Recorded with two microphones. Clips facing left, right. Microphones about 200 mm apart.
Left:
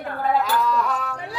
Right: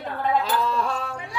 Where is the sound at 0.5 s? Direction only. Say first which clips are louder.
Left 2 dB; 30° right (ahead or behind).